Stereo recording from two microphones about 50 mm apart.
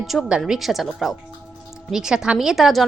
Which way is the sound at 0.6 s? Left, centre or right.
Centre.